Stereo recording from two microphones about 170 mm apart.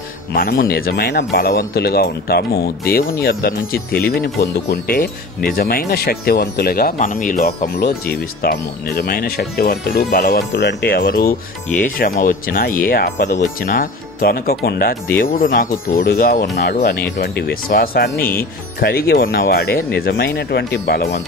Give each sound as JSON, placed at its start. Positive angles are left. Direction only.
{"t": 0.3, "sound": "speech", "side_deg": 60}
{"t": 1.3, "sound": "speech", "side_deg": 60}
{"t": 13.3, "sound": "speech", "side_deg": 50}